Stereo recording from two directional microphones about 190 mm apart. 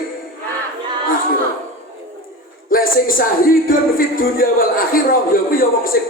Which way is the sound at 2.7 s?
45° left (ahead or behind).